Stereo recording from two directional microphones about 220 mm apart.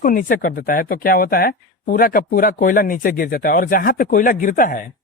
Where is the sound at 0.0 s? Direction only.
40° left (ahead or behind).